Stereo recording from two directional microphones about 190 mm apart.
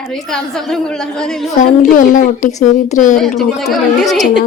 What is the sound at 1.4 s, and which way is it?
A woman's voice, 40° left (ahead or behind).